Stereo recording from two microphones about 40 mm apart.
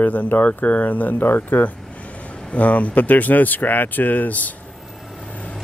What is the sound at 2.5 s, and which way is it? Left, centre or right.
Speech, left.